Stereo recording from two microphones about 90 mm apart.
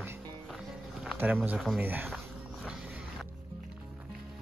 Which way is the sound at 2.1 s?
5° right (ahead or behind).